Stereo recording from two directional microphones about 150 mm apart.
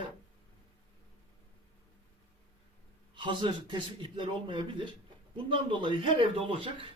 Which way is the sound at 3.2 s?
30° right (ahead or behind).